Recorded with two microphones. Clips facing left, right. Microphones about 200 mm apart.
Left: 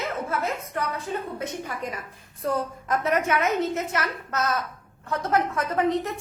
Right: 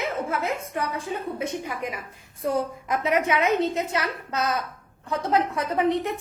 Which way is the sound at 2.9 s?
10° right (ahead or behind).